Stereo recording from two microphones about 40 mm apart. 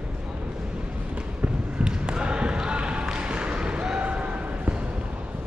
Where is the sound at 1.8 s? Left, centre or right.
Right.